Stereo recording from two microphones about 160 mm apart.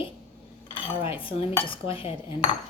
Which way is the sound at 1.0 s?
35° left (ahead or behind).